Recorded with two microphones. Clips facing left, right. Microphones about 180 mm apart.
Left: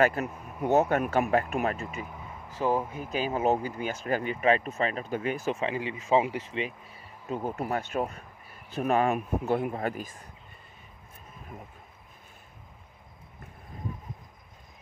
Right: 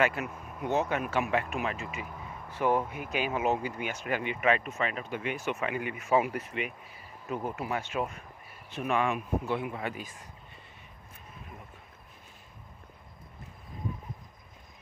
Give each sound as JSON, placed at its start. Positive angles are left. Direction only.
{"t": 0.0, "sound": "speech", "side_deg": 40}
{"t": 2.6, "sound": "speech", "side_deg": 25}
{"t": 5.6, "sound": "speech", "side_deg": 25}
{"t": 7.5, "sound": "speech", "side_deg": 40}